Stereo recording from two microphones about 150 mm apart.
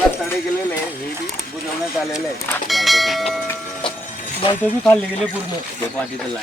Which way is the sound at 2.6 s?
Centre (ahead or behind).